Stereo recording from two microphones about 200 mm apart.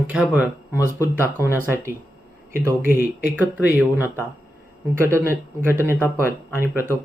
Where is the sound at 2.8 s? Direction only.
45° left (ahead or behind).